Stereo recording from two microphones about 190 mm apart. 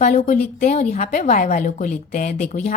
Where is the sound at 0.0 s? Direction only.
40° left (ahead or behind).